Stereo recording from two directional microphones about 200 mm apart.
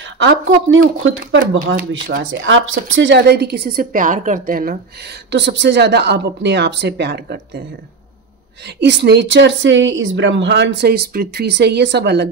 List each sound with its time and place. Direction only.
0.0 s speech: 70° right (ahead or behind)
2.4 s speech: 75° right (ahead or behind)
2.9 s a woman's voice: 65° right (ahead or behind); by 5.1 s 45° right (ahead or behind)
5.3 s a woman's voice: 60° right (ahead or behind)
8.6 s a woman's voice: 60° right (ahead or behind)